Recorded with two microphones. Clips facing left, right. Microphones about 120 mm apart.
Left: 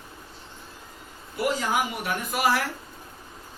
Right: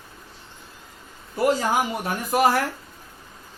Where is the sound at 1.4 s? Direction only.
40° right (ahead or behind).